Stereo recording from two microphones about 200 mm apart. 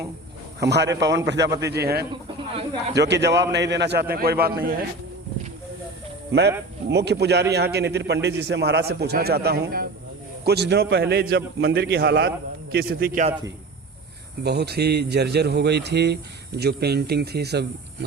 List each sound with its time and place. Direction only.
0.6 s a man's voice: 60° right (ahead or behind)
6.9 s a man's voice: 55° right (ahead or behind)
14.4 s a man's voice: 55° right (ahead or behind)